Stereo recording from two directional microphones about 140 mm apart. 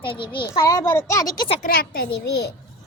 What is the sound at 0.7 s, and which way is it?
Speech, 25° left (ahead or behind).